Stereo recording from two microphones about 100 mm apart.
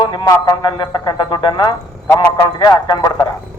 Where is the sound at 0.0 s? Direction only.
50° left (ahead or behind).